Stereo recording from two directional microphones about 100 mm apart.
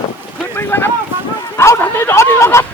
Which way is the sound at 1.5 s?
25° left (ahead or behind).